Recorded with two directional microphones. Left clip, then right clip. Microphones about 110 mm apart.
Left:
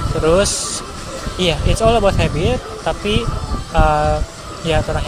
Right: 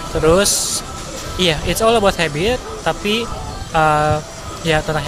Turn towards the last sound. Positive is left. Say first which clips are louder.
# right 1 dB
turn(degrees=-30)  # may be behind; listen again after turning